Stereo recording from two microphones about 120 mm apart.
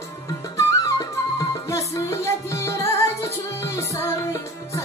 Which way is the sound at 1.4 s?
25° left (ahead or behind).